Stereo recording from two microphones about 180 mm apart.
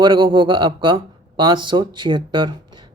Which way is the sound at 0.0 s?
25° right (ahead or behind).